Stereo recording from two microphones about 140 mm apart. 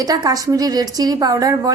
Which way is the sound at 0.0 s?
25° right (ahead or behind).